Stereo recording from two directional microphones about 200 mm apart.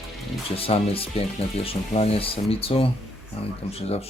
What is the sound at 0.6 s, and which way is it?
Speech, 30° left (ahead or behind).